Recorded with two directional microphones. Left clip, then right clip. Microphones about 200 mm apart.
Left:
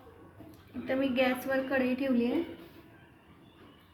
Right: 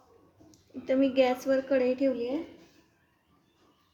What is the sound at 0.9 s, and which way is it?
A woman's voice, 45° right (ahead or behind).